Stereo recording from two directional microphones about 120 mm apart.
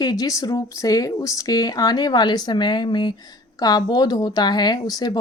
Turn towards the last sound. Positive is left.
turn(degrees=30)  # may be behind; listen again after turning